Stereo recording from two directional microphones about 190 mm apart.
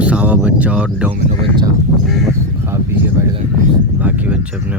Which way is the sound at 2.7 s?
15° right (ahead or behind).